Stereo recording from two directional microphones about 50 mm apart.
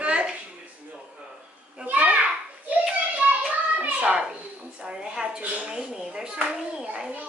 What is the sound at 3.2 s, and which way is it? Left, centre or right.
Child singing, right.